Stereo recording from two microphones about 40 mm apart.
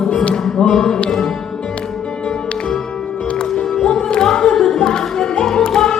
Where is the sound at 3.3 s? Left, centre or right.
Centre.